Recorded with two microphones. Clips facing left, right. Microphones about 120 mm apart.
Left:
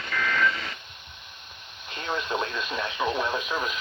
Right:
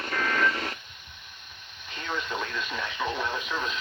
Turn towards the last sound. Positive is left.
turn(degrees=15)  # may be behind; listen again after turning